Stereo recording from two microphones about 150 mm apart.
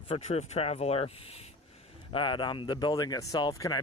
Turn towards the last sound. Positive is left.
turn(degrees=25)  # may be behind; listen again after turning